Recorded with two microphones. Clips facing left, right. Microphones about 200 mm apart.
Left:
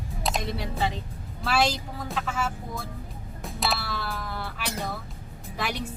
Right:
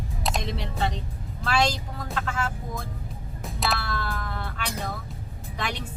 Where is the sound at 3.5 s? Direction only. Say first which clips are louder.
Right 1 dB; centre (ahead or behind).